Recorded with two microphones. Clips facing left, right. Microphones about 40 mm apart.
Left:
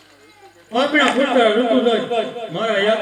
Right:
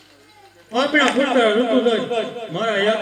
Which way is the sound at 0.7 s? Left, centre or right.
Left.